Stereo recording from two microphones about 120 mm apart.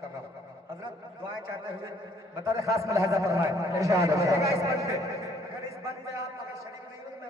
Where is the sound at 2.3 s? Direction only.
25° right (ahead or behind).